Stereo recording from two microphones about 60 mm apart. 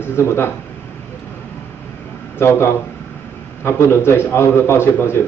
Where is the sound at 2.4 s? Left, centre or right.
Left.